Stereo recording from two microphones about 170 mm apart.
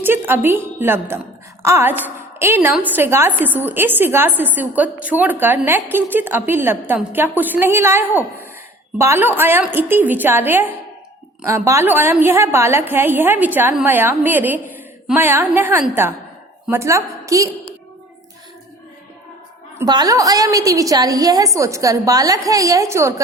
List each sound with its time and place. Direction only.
0.0 s a woman's voice: 10° right (ahead or behind)
19.8 s a woman's voice: 20° right (ahead or behind)